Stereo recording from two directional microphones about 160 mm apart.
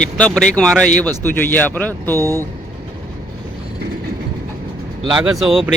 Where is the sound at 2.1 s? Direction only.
20° right (ahead or behind).